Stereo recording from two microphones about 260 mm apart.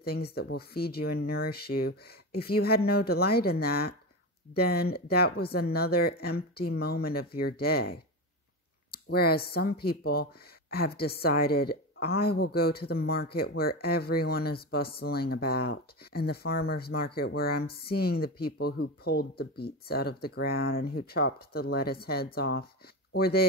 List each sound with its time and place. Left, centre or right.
0.0 s a woman's voice: left